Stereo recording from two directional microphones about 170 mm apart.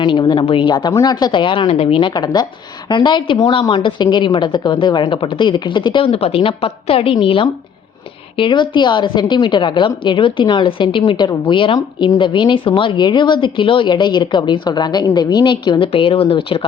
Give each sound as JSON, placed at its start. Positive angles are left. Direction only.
{"t": 0.0, "sound": "a woman's voice", "side_deg": 25}